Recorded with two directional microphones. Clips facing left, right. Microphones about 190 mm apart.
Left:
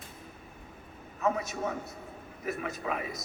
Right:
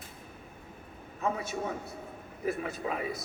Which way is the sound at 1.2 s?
30° right (ahead or behind).